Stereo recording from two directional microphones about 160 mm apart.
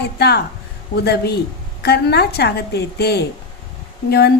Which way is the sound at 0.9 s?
90° left.